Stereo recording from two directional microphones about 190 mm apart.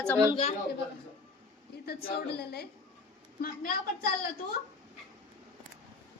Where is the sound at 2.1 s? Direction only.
55° left (ahead or behind).